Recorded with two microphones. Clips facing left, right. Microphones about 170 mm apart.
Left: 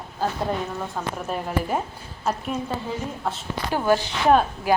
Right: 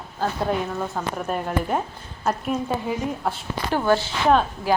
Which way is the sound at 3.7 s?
15° left (ahead or behind).